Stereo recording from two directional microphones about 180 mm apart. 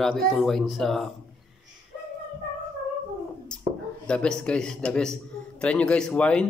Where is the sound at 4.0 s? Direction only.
5° left (ahead or behind).